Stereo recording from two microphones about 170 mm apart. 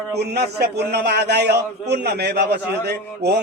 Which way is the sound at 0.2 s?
75° right (ahead or behind).